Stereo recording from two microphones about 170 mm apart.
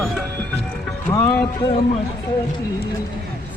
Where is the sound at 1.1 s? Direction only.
15° left (ahead or behind).